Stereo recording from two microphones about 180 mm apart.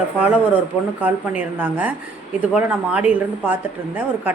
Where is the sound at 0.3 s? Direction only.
10° right (ahead or behind).